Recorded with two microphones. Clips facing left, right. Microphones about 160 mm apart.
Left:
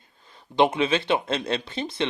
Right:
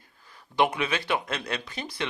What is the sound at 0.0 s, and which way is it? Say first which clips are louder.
Speech: left 1 dB; 25° left (ahead or behind).